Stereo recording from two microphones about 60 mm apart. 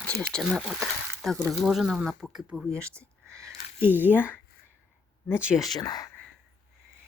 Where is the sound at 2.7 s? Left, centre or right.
Centre.